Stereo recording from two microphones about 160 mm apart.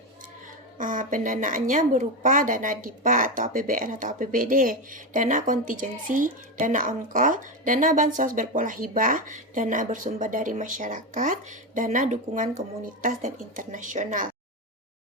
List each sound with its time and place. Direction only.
0.8 s a woman's voice: 55° right (ahead or behind)